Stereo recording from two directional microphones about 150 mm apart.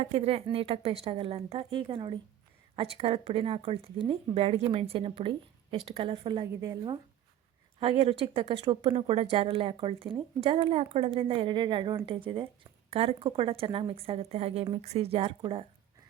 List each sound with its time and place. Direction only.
0.0 s a woman's voice: 45° right (ahead or behind)
6.5 s a woman's voice: 20° right (ahead or behind)
7.8 s a woman's voice: 40° right (ahead or behind)